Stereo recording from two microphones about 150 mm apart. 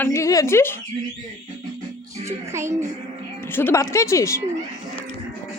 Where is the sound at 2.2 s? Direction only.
20° right (ahead or behind).